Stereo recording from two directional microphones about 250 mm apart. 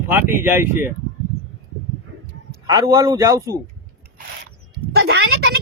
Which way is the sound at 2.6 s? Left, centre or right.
Centre.